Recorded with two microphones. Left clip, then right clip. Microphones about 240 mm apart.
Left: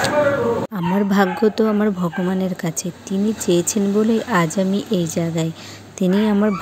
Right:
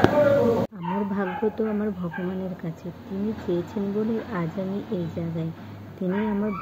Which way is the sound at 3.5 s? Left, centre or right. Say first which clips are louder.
Left 9 dB; left.